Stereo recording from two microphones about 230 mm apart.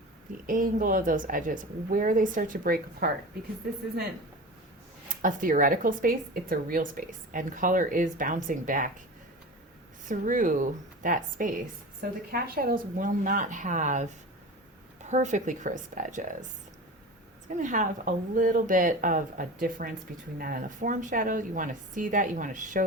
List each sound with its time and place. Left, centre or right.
0.4 s speech: right
5.0 s speech: right
10.1 s speech: right
15.1 s speech: right
17.5 s speech: right